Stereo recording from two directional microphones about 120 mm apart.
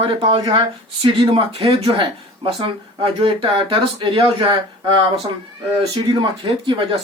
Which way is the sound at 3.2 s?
50° right (ahead or behind).